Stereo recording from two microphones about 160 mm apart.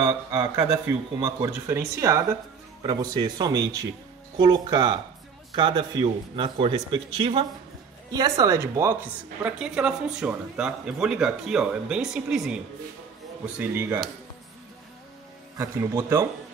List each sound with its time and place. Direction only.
0.0 s a man's voice: 25° right (ahead or behind); by 12.5 s 5° right (ahead or behind)
13.6 s speech: 10° right (ahead or behind)
15.5 s a man's voice: 20° right (ahead or behind)